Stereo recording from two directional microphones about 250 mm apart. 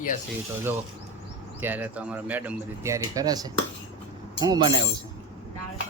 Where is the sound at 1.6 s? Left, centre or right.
Centre.